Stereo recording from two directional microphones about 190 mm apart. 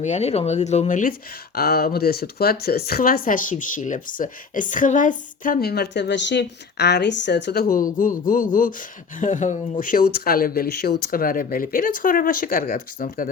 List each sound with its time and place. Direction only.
0.0 s speech: 35° left (ahead or behind)
1.5 s speech: 55° left (ahead or behind)